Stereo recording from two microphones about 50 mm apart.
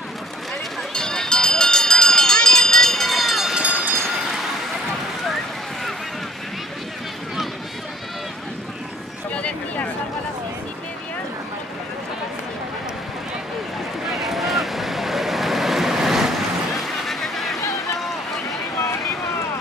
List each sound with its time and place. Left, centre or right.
0.9 s run: centre
4.2 s a sound: centre
9.3 s a sound: left
14.1 s vehicle: centre
16.7 s vehicle: centre
18.8 s boat: left